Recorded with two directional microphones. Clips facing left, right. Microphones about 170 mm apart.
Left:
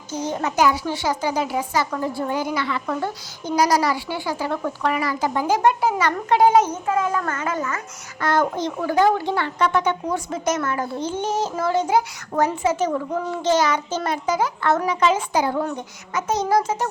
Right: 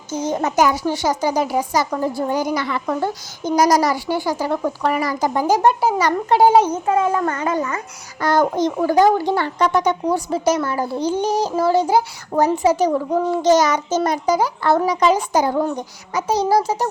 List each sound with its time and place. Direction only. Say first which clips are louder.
0.1 s speech: right 4 dB; 45° right (ahead or behind)